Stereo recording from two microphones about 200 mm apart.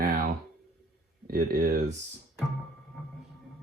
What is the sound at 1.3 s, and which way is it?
Speech, 50° right (ahead or behind).